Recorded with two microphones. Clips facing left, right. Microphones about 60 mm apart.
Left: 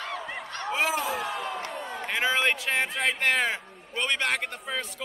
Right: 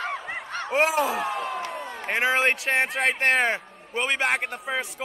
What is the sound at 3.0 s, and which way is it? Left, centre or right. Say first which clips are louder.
Speech: right 2 dB; right.